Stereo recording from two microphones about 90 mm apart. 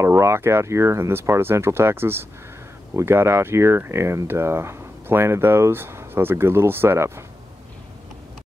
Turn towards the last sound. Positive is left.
turn(degrees=-25)  # may be behind; listen again after turning